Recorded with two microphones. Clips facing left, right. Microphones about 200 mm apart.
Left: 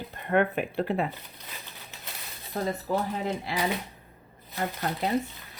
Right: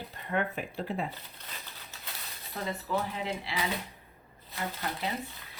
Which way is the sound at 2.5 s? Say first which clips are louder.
Left 5 dB; 40° left (ahead or behind).